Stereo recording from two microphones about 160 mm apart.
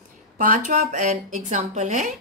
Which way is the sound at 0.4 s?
60° right (ahead or behind).